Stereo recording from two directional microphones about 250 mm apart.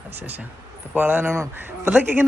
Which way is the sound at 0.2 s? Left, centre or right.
Centre.